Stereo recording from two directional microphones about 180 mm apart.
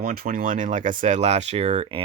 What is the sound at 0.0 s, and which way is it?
Speech, 55° right (ahead or behind).